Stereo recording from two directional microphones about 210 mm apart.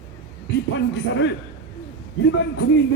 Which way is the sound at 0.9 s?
55° left (ahead or behind).